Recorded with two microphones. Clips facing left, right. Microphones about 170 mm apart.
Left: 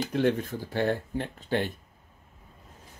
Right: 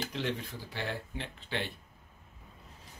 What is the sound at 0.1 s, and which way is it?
Speech, 50° left (ahead or behind).